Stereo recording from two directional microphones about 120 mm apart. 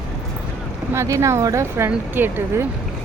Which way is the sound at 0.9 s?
25° right (ahead or behind).